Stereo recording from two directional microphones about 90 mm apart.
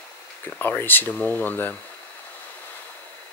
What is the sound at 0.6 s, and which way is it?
Speech, 20° left (ahead or behind).